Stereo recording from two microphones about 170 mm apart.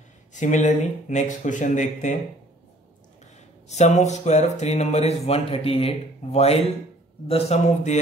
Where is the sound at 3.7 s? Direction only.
40° left (ahead or behind).